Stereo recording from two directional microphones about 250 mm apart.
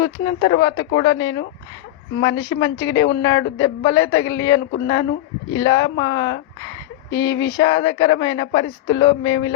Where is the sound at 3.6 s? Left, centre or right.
Centre.